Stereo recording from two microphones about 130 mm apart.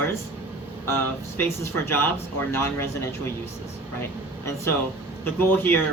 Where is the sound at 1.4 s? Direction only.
20° left (ahead or behind).